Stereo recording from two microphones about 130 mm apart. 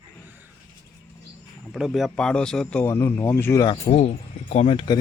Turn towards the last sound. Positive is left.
turn(degrees=55)  # may be behind; listen again after turning